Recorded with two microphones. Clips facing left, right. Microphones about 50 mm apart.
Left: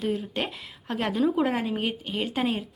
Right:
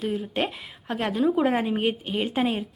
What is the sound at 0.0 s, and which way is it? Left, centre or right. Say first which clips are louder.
A woman's voice: right 2 dB; centre.